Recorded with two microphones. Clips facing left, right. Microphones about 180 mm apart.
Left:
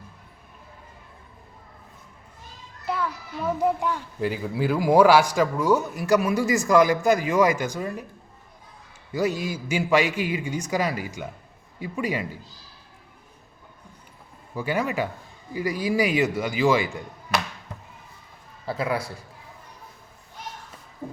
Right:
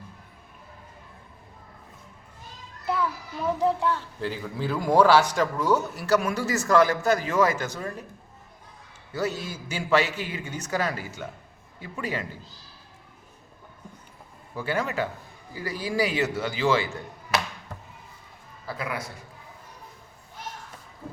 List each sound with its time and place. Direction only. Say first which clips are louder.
2.8 s a child's voice: right 1 dB; centre (ahead or behind)
9.1 s a child's voice: left 4 dB; 15° left (ahead or behind)
14.5 s a child's voice: left 2 dB; 15° left (ahead or behind)
18.6 s a man's voice: left 6 dB; 25° left (ahead or behind)